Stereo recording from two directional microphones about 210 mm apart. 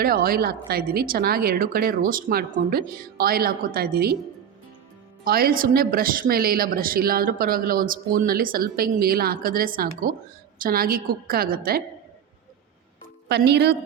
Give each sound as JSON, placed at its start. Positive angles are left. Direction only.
{"t": 0.0, "sound": "speech", "side_deg": -45}
{"t": 5.2, "sound": "speech", "side_deg": -45}
{"t": 13.2, "sound": "speech", "side_deg": -50}